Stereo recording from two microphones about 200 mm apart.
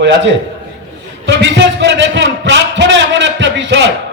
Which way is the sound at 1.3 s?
60° right (ahead or behind).